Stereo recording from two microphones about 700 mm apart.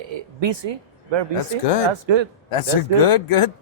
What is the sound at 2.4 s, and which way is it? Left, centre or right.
Speech, left.